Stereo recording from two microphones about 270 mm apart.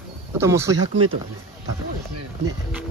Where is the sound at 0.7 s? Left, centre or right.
Right.